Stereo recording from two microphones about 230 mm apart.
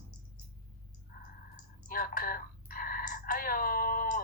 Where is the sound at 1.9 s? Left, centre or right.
Left.